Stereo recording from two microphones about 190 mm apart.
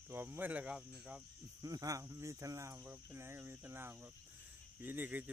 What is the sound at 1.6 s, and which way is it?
Speech, 20° right (ahead or behind).